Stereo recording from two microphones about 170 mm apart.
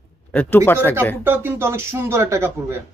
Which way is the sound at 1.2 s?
10° right (ahead or behind).